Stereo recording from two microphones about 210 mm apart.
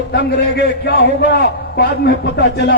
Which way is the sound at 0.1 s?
50° left (ahead or behind).